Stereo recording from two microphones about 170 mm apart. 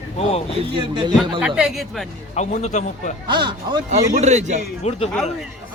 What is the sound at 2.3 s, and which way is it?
Speech, 40° left (ahead or behind).